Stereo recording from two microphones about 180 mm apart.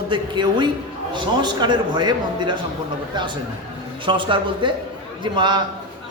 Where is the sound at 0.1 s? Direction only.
25° right (ahead or behind).